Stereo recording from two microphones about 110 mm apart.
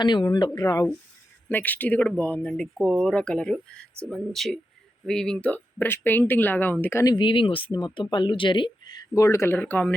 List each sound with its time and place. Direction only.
0.0 s speech: 40° left (ahead or behind)
1.5 s speech: 15° left (ahead or behind)
7.0 s speech: 40° left (ahead or behind); by 9.8 s 15° left (ahead or behind)